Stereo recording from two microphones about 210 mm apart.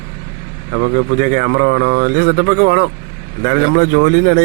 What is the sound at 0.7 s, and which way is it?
A man's voice, 50° right (ahead or behind).